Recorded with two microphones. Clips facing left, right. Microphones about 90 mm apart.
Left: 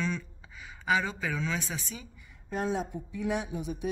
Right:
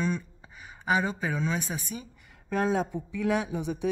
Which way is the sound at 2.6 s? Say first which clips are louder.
Right 4 dB; 90° right.